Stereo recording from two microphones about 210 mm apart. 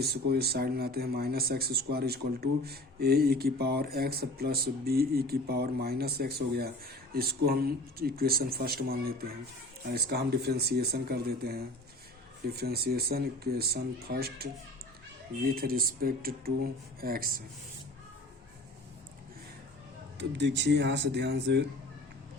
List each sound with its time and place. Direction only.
0.0 s speech: 50° right (ahead or behind)
15.5 s speech: 45° right (ahead or behind)
20.1 s speech: 55° right (ahead or behind)